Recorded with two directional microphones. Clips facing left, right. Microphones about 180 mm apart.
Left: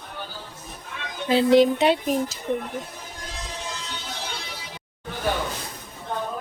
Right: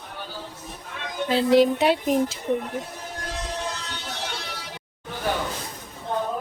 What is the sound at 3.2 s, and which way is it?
Music, 65° right (ahead or behind).